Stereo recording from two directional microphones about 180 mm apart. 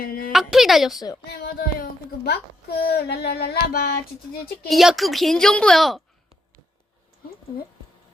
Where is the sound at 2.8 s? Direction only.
65° left (ahead or behind).